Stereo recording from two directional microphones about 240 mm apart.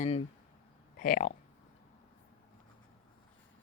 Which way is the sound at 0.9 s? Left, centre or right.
Left.